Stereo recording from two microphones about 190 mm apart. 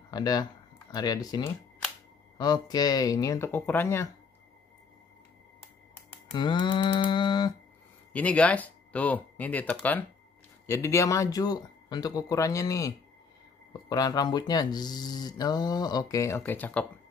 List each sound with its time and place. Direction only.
0.1 s speech: 20° left (ahead or behind)
6.3 s speech: 25° left (ahead or behind)
8.1 s speech: 5° left (ahead or behind)